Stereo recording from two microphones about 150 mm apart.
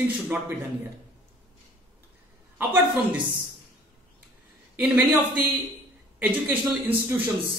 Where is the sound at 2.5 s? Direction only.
10° right (ahead or behind).